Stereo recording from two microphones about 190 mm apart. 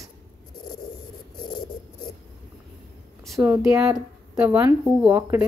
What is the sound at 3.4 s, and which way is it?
Speech, 15° right (ahead or behind).